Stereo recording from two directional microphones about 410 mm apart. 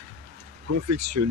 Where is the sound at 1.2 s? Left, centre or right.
Right.